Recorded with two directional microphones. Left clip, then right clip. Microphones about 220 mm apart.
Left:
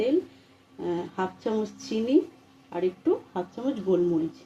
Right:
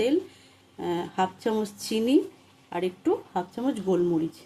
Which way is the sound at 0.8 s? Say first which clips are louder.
Right 3 dB; 30° right (ahead or behind).